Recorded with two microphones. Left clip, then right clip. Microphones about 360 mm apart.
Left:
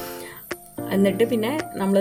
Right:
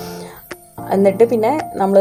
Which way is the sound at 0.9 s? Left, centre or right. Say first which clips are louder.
Right 8 dB; left.